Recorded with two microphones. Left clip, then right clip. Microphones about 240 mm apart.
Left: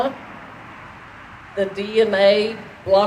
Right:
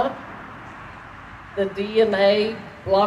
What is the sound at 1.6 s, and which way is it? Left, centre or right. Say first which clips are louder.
Speech: left 1 dB; left.